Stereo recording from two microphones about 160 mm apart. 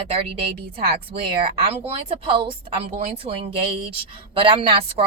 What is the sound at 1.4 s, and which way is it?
A woman's voice, 40° right (ahead or behind).